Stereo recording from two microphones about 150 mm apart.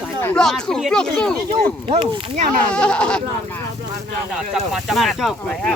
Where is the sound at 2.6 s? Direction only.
5° left (ahead or behind).